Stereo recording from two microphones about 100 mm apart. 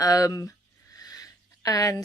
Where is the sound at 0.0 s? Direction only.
35° left (ahead or behind).